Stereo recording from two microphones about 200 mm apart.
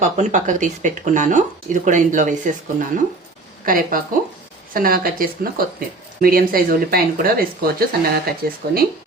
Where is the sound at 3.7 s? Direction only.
45° right (ahead or behind).